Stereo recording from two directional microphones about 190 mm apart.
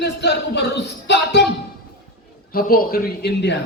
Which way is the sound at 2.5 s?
50° left (ahead or behind).